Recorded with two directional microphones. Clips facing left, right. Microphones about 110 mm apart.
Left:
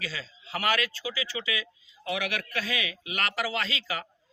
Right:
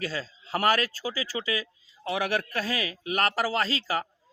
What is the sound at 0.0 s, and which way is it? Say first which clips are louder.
A man's voice: right 5 dB; 45° right (ahead or behind).